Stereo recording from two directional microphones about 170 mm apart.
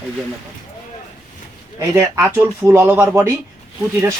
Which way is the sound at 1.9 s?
15° right (ahead or behind).